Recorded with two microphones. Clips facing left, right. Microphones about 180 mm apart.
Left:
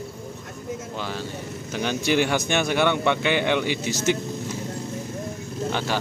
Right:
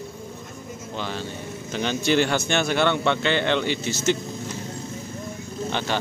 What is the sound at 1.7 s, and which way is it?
A man's voice, 10° left (ahead or behind).